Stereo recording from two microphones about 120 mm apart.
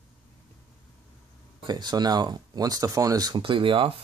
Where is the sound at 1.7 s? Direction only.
35° right (ahead or behind).